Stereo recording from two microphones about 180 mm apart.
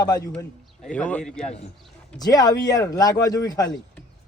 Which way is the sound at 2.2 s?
20° left (ahead or behind).